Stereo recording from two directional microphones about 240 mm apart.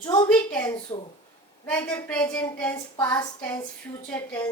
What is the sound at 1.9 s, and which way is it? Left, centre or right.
A woman's voice, centre.